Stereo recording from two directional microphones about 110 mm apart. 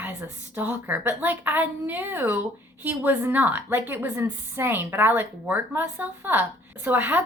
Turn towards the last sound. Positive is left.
turn(degrees=-15)  # may be behind; listen again after turning